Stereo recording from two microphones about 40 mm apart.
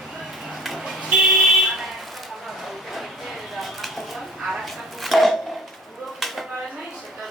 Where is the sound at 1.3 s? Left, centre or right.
Centre.